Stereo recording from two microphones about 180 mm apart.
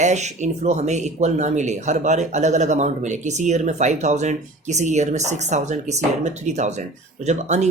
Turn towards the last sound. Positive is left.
turn(degrees=-40)  # may be behind; listen again after turning